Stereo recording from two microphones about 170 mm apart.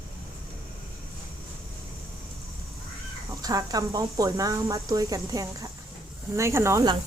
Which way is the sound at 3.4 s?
20° right (ahead or behind).